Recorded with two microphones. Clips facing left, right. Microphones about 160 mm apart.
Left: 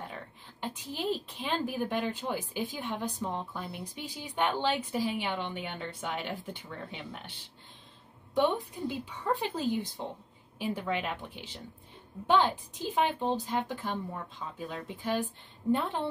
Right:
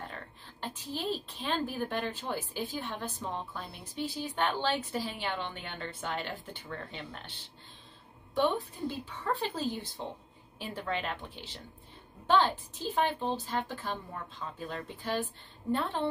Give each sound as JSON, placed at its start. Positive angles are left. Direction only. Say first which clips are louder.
{"t": 0.1, "sound": "a woman's voice", "louder": "left 2 dB", "side_deg": 15}
{"t": 8.4, "sound": "a woman's voice", "louder": "left 1 dB", "side_deg": 15}